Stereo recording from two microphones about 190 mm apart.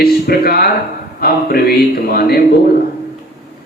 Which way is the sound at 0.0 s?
55° left (ahead or behind).